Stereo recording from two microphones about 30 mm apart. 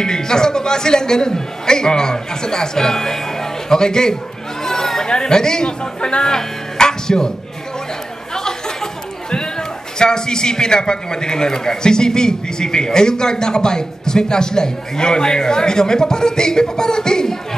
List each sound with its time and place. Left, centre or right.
0.0 s a man's voice: left
4.6 s chatter: centre
5.0 s a man's voice: left
6.2 s speech: left
8.4 s chatter: centre
9.3 s a man's voice: left